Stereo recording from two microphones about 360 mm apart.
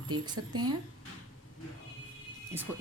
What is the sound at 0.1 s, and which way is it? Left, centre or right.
Speech, right.